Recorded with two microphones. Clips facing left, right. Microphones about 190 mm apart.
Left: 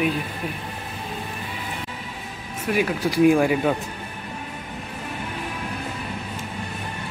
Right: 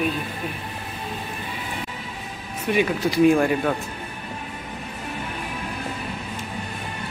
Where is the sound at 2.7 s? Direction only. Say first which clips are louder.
Right 1 dB; 5° left (ahead or behind).